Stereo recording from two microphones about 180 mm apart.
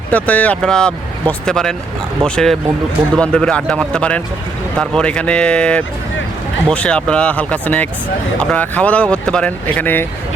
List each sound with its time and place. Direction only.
0.1 s speech: 10° left (ahead or behind)